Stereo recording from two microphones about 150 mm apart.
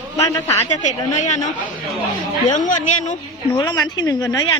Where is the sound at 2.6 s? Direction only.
55° left (ahead or behind).